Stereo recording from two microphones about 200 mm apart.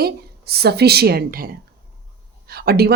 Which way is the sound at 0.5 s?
55° right (ahead or behind).